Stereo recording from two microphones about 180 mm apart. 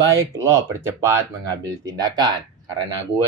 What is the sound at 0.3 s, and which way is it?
Speech, 15° right (ahead or behind).